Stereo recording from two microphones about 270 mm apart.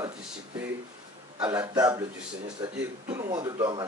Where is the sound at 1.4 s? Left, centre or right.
Centre.